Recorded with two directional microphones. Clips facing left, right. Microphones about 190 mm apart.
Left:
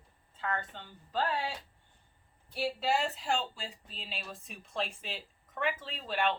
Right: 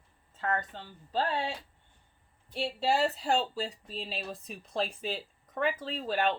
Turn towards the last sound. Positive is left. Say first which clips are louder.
# right 3 dB
turn(degrees=-40)  # may be behind; listen again after turning